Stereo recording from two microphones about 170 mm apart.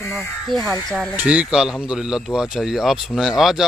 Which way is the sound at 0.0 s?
15° left (ahead or behind).